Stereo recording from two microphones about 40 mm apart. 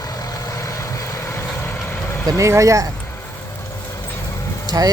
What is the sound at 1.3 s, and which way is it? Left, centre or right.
Vehicle, left.